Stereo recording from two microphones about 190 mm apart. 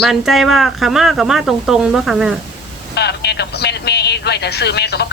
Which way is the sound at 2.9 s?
60° left (ahead or behind).